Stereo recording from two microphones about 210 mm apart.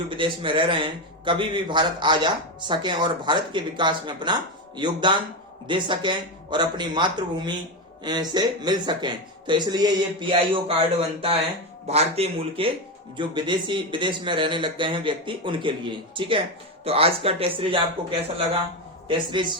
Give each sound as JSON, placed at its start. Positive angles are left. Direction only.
{"t": 0.1, "sound": "a man's voice", "side_deg": -25}